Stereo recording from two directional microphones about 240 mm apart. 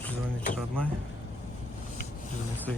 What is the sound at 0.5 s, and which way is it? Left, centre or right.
Speech, centre.